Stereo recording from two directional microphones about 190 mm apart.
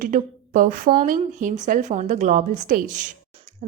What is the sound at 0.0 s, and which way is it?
A woman's voice, 45° right (ahead or behind).